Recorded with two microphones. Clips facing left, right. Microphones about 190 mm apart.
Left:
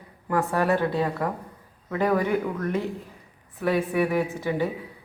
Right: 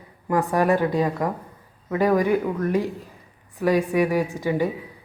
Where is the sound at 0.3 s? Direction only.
15° right (ahead or behind).